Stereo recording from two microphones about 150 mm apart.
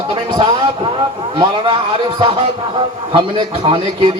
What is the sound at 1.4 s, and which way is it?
Speech, 35° right (ahead or behind).